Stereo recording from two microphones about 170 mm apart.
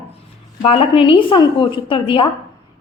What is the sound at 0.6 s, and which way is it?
A woman's voice, 35° left (ahead or behind).